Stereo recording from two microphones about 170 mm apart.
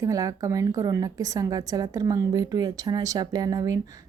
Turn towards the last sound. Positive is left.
turn(degrees=-20)  # may be behind; listen again after turning